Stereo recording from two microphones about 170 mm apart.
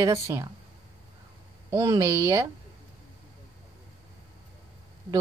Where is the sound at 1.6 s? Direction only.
20° right (ahead or behind).